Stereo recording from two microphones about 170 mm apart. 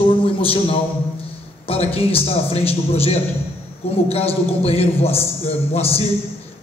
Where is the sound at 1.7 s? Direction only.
35° left (ahead or behind).